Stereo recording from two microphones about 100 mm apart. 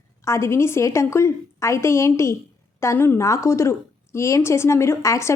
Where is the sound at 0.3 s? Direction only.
25° left (ahead or behind).